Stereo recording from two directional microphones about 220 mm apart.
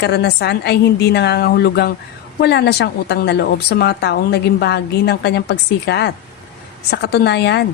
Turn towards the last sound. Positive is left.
turn(degrees=50)  # may be behind; listen again after turning